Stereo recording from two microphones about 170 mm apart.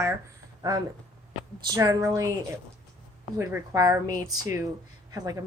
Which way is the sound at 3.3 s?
15° right (ahead or behind).